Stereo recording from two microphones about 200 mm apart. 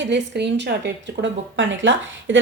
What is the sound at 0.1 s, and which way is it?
A woman's voice, 60° right (ahead or behind).